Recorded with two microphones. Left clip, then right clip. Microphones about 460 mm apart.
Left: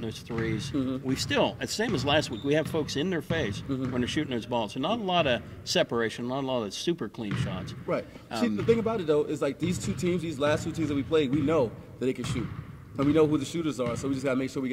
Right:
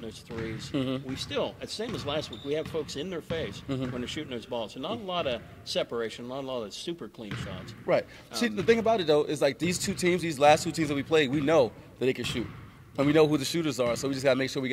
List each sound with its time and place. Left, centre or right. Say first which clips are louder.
0.7 s a man's voice: right 3 dB; right
1.1 s a man's voice: left 9 dB; left
7.9 s a man's voice: right 4 dB; right